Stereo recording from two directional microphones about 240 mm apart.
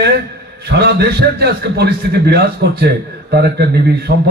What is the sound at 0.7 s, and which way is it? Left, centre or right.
A man's voice, right.